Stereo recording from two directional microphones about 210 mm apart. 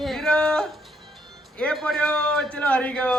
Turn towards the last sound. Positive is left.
turn(degrees=5)  # may be behind; listen again after turning